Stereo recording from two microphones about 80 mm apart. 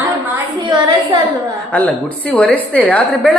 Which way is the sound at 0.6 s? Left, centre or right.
Right.